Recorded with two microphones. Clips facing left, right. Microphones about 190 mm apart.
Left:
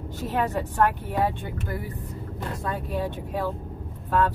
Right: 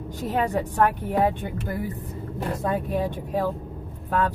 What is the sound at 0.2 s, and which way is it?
Speech, 15° right (ahead or behind).